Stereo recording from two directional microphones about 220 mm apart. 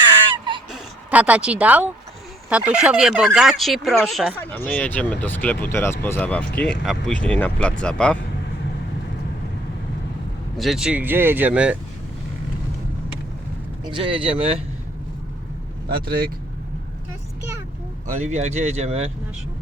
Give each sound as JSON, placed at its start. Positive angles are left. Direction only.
{"t": 0.7, "sound": "speech", "side_deg": -5}
{"t": 10.6, "sound": "speech", "side_deg": 0}
{"t": 13.8, "sound": "speech", "side_deg": -20}
{"t": 15.9, "sound": "speech", "side_deg": -45}
{"t": 18.2, "sound": "speech", "side_deg": -30}